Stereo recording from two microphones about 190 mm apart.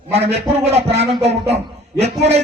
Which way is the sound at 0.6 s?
35° right (ahead or behind).